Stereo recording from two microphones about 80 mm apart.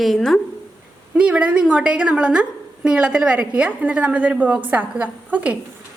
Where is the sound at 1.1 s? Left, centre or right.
Centre.